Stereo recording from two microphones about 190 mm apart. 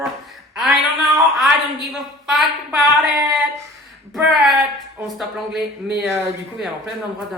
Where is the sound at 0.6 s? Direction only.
Centre (ahead or behind).